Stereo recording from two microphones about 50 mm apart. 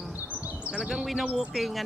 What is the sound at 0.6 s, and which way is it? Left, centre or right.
Bird, centre.